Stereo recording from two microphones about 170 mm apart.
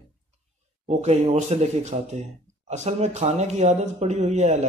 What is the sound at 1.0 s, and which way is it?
Speech, 40° right (ahead or behind).